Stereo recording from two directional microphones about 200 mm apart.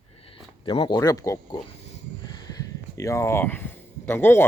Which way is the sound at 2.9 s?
15° left (ahead or behind).